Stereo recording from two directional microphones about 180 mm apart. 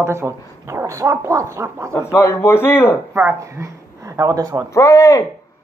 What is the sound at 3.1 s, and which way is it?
Speech, 15° right (ahead or behind).